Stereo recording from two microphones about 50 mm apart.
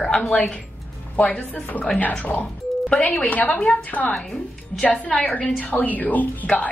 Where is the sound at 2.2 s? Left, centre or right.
Left.